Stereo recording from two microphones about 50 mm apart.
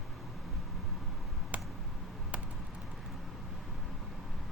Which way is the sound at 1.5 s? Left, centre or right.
Right.